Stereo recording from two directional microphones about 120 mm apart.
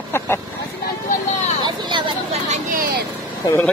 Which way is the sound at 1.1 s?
90° left.